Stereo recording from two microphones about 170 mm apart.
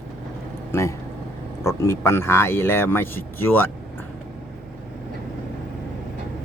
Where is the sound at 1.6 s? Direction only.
15° left (ahead or behind).